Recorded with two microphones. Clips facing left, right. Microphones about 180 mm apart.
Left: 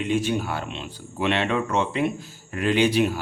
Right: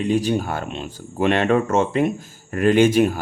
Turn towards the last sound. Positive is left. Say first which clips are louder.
# right 5 dB
turn(degrees=-45)  # may be behind; listen again after turning